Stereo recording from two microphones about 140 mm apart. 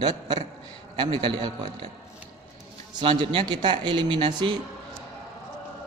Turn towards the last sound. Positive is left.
turn(degrees=-35)  # may be behind; listen again after turning